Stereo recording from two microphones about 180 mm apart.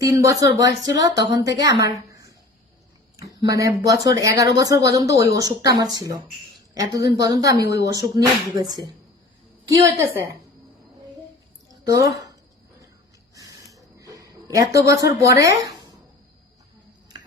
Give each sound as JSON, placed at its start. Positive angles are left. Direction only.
{"t": 0.0, "sound": "speech", "side_deg": -20}
{"t": 3.5, "sound": "a woman's voice", "side_deg": -20}
{"t": 11.9, "sound": "a woman's voice", "side_deg": -20}
{"t": 13.3, "sound": "a sound", "side_deg": -20}
{"t": 15.2, "sound": "a woman's voice", "side_deg": -15}